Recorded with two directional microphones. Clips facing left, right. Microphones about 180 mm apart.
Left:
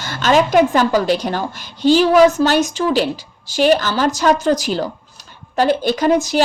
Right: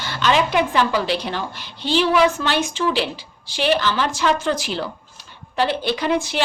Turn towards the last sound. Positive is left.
turn(degrees=40)  # may be behind; listen again after turning